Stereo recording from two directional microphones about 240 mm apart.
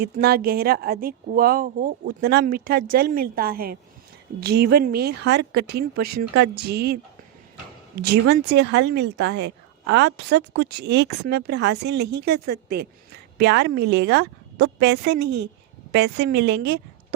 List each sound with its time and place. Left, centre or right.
0.0 s a woman's voice: right